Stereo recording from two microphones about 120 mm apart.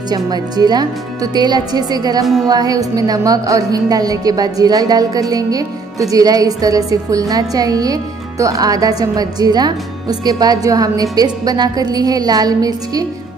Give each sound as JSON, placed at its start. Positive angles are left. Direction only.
{"t": 0.1, "sound": "a woman's voice", "side_deg": -35}